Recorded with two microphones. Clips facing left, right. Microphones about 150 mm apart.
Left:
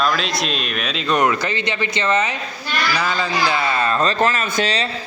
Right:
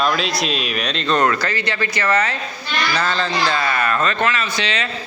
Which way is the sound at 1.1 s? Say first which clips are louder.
Even; 15° left (ahead or behind).